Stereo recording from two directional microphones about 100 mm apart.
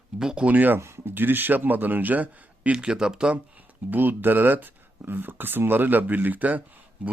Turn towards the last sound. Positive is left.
turn(degrees=-15)  # may be behind; listen again after turning